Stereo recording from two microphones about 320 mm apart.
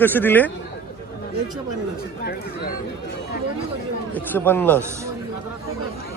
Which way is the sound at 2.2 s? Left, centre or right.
Left.